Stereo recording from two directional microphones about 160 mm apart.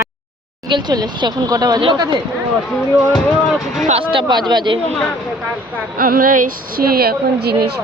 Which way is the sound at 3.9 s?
35° right (ahead or behind).